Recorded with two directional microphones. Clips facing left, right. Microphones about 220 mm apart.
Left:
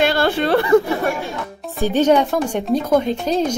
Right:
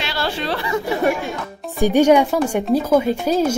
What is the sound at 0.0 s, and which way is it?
Speech, 50° left (ahead or behind).